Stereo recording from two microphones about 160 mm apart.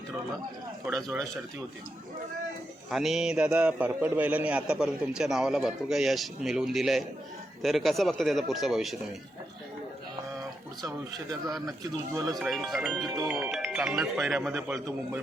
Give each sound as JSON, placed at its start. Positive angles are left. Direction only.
{"t": 0.9, "sound": "a man's voice", "side_deg": 0}
{"t": 2.9, "sound": "a man's voice", "side_deg": 0}
{"t": 10.8, "sound": "a man's voice", "side_deg": -20}
{"t": 12.4, "sound": "a man's voice", "side_deg": 0}